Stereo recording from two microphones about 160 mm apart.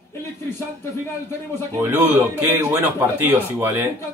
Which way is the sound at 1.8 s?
15° right (ahead or behind).